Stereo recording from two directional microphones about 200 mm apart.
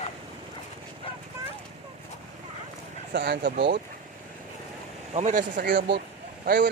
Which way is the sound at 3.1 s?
55° right (ahead or behind).